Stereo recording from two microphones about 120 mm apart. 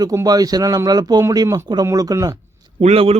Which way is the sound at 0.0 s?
30° right (ahead or behind).